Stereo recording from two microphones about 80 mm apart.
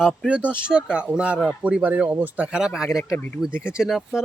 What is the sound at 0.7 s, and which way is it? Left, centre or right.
Speech, centre.